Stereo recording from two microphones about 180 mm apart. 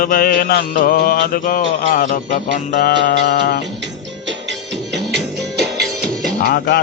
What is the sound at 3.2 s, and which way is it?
Music, 65° left (ahead or behind).